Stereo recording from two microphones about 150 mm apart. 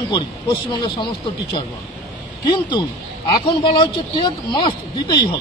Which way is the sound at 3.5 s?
35° left (ahead or behind).